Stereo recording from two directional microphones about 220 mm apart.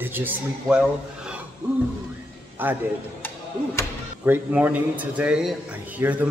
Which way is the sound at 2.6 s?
10° right (ahead or behind).